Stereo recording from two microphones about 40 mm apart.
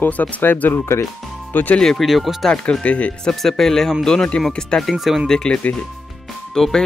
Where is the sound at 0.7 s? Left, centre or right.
Left.